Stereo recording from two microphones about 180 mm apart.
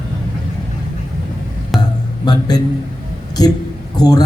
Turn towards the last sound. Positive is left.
turn(degrees=20)  # may be behind; listen again after turning